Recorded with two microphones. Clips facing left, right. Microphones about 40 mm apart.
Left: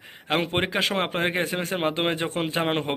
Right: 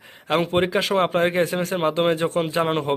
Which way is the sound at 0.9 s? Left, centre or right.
Left.